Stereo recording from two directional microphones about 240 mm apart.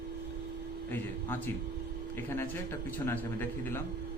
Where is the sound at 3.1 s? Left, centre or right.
Centre.